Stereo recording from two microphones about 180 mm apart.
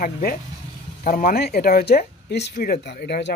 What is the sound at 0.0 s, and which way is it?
Speech, 50° left (ahead or behind).